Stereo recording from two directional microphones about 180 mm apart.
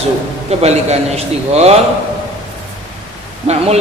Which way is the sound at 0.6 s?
35° right (ahead or behind).